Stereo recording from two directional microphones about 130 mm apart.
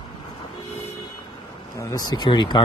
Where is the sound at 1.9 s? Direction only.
35° left (ahead or behind).